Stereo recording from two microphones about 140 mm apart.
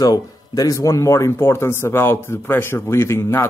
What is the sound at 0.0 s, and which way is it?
Speech, 25° left (ahead or behind).